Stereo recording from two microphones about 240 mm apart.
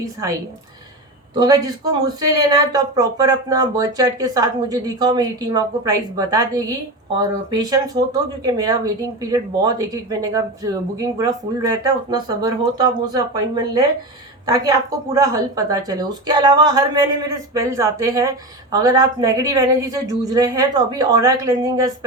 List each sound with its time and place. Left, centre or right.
0.0 s speech: centre
1.4 s speech: centre
14.4 s speech: centre